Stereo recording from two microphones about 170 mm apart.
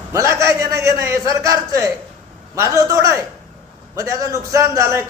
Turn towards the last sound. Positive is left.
turn(degrees=-15)  # may be behind; listen again after turning